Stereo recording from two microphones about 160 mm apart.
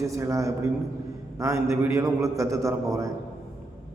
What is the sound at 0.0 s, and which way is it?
A man's voice, 20° right (ahead or behind).